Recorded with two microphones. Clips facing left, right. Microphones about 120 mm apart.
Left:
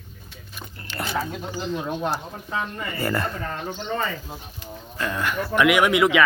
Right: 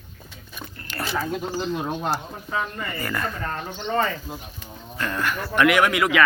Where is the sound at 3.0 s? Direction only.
30° left (ahead or behind).